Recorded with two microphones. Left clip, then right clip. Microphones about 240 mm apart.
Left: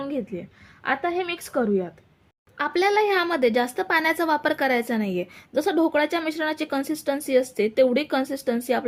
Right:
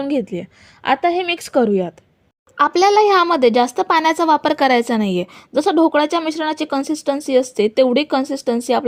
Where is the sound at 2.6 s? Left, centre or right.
Right.